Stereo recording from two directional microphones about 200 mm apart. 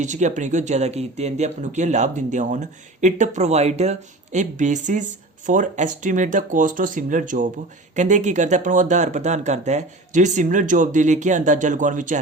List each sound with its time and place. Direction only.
0.0 s speech: 35° right (ahead or behind)